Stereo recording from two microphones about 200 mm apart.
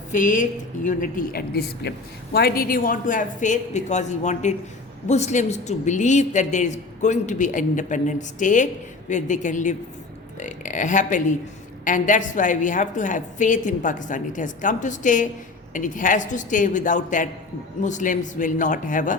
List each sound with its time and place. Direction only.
0.1 s a woman's voice: 40° left (ahead or behind)